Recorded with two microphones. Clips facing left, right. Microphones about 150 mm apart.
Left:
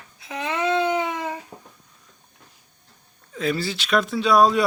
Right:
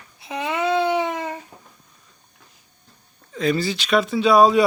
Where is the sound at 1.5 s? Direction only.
45° left (ahead or behind).